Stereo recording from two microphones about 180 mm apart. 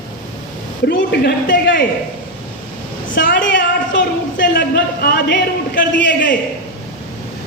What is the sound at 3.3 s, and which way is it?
Speech, 85° left.